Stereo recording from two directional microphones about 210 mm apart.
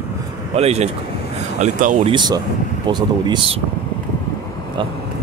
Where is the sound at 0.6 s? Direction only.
30° right (ahead or behind).